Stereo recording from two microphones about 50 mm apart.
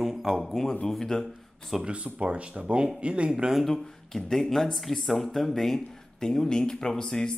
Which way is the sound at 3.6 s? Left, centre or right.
Centre.